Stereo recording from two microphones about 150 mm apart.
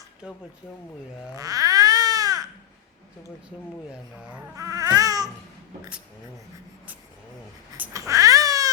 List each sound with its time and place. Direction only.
0.2 s speech: 5° right (ahead or behind)
1.4 s baby cry: 25° right (ahead or behind)
4.5 s baby cry: 25° right (ahead or behind)
7.9 s cat: 20° right (ahead or behind)